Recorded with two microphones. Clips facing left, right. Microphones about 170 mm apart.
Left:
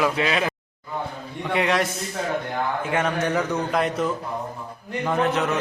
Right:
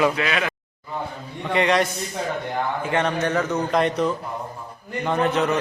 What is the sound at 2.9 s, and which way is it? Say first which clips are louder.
A man's voice: right 1 dB; 10° left (ahead or behind).